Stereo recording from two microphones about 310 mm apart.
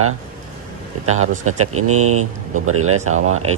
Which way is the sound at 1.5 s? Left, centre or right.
Right.